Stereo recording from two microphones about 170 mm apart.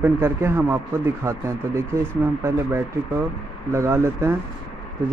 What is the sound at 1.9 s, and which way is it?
Speech, 15° right (ahead or behind).